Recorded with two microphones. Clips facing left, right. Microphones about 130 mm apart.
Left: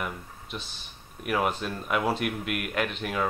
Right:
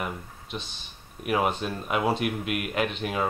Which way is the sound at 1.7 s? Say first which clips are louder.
Right 1 dB; 15° right (ahead or behind).